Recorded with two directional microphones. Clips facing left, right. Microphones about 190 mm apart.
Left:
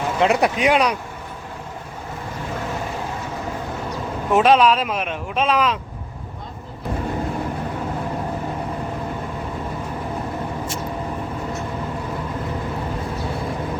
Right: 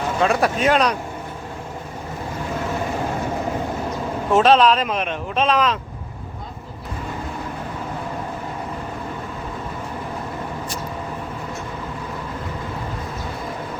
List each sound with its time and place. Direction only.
0.2 s speech: 20° left (ahead or behind)
4.3 s speech: 15° left (ahead or behind)